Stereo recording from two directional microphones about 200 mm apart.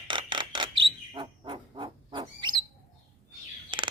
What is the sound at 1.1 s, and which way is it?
Owl, 20° right (ahead or behind).